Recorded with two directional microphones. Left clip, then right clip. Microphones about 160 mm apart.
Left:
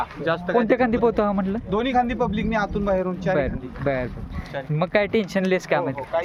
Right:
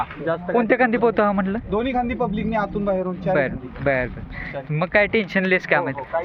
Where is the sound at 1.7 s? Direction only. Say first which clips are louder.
Left 1 dB; 30° right (ahead or behind).